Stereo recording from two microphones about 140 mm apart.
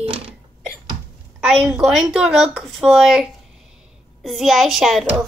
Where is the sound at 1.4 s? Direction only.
5° right (ahead or behind).